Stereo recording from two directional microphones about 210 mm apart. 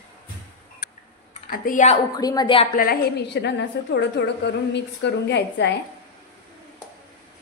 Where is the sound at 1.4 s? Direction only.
40° left (ahead or behind).